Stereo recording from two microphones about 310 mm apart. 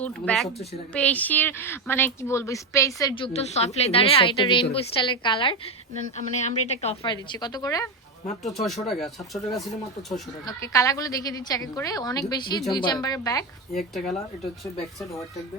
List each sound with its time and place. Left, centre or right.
0.0 s speech: centre
8.4 s speech: centre
10.4 s speech: centre
13.7 s speech: centre